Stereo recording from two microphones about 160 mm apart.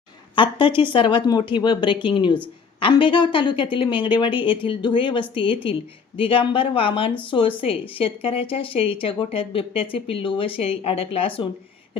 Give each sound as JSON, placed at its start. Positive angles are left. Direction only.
{"t": 0.3, "sound": "speech", "side_deg": 30}